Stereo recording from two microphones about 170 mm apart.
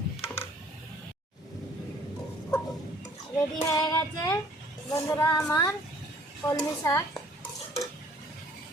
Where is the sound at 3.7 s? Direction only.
20° left (ahead or behind).